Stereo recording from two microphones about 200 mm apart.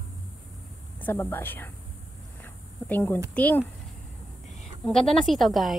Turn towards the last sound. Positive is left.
turn(degrees=0)  # may be behind; listen again after turning